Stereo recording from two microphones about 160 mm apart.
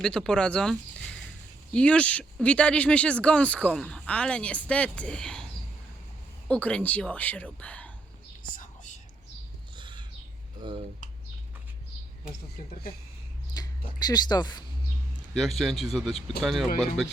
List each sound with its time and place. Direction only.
0.0 s speech: 5° left (ahead or behind)
6.5 s speech: 5° left (ahead or behind)
8.5 s whispering: 50° left (ahead or behind)
9.7 s a sound: 30° right (ahead or behind)
10.6 s speech: 30° right (ahead or behind)
13.6 s speech: 25° left (ahead or behind)
15.4 s speech: centre (ahead or behind)